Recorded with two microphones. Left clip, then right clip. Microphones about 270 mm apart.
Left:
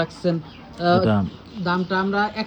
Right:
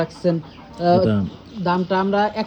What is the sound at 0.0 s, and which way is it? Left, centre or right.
A woman's voice, centre.